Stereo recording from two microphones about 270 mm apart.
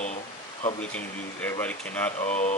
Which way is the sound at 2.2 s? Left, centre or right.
Left.